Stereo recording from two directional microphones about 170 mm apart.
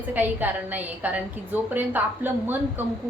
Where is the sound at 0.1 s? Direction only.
10° right (ahead or behind).